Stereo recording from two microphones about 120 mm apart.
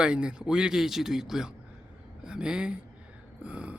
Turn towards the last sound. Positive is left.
turn(degrees=-10)  # may be behind; listen again after turning